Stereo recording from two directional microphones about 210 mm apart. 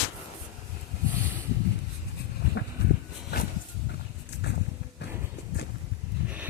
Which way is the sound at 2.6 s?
60° left (ahead or behind).